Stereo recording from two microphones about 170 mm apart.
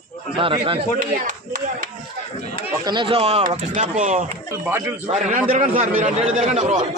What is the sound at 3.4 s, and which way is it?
Speech, 50° right (ahead or behind).